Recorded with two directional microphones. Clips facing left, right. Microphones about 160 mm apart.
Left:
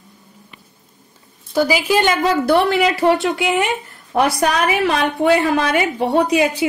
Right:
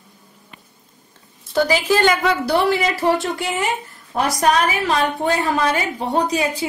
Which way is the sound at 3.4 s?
70° left (ahead or behind).